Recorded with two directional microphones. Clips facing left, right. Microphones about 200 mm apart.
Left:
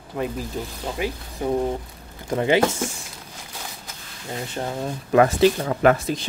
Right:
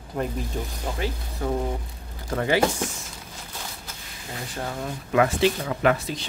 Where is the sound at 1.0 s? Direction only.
15° left (ahead or behind).